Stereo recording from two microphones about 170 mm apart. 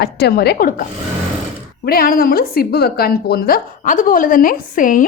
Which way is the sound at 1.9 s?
60° left (ahead or behind).